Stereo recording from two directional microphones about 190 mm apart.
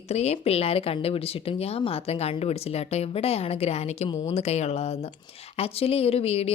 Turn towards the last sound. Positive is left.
turn(degrees=30)  # may be behind; listen again after turning